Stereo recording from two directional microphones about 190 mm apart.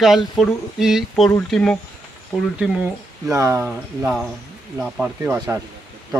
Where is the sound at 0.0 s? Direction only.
Centre (ahead or behind).